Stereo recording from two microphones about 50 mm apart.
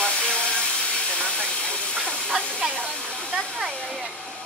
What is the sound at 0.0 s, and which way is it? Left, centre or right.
Steam, left.